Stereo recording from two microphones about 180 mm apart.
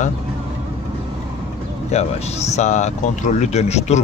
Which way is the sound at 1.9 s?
35° left (ahead or behind).